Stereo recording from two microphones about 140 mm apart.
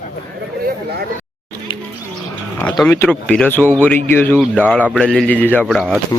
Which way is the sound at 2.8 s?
15° left (ahead or behind).